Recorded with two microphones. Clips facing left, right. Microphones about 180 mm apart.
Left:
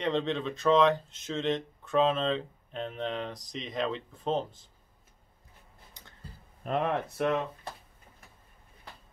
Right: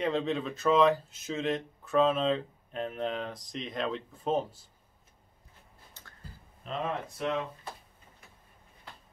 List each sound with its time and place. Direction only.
0.0 s speech: 5° right (ahead or behind)
6.0 s a sound: 15° left (ahead or behind)
6.6 s speech: 60° left (ahead or behind)